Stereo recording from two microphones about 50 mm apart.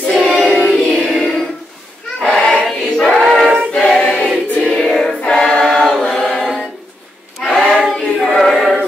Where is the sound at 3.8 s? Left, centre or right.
Centre.